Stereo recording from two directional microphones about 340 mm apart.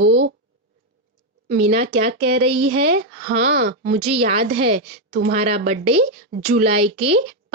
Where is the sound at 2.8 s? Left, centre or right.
Right.